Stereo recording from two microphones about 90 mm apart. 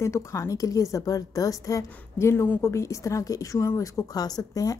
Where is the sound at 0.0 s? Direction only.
35° left (ahead or behind).